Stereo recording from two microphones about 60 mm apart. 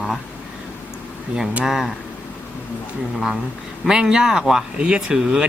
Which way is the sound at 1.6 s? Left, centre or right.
Centre.